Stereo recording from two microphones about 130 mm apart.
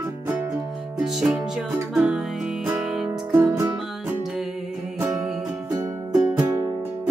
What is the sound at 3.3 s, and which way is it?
Music, 25° right (ahead or behind).